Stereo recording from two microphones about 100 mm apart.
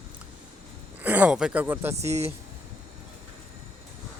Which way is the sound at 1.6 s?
20° right (ahead or behind).